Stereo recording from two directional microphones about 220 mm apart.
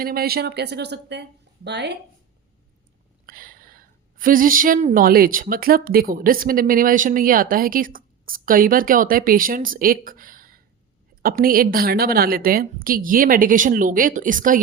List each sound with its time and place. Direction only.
0.0 s speech: 45° right (ahead or behind)
3.2 s a woman's voice: 40° right (ahead or behind)